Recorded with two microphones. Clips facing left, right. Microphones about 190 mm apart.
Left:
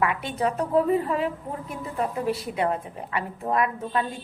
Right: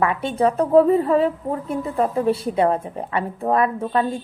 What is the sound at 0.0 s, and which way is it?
A woman's voice, 30° right (ahead or behind).